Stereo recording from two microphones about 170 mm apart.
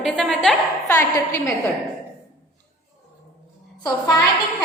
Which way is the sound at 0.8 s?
20° left (ahead or behind).